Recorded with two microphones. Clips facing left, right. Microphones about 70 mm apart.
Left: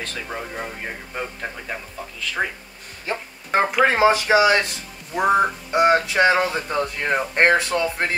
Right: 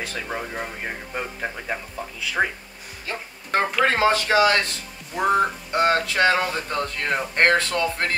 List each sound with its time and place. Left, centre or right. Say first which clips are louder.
0.0 s speech: right 1 dB; centre
3.1 s speech: left 4 dB; left
3.5 s speech: left 3 dB; centre